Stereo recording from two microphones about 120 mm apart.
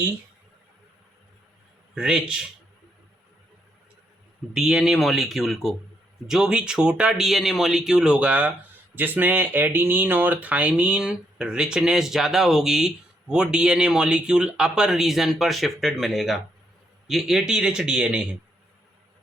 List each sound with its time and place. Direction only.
2.0 s speech: 5° right (ahead or behind)
4.5 s a man's voice: 5° right (ahead or behind)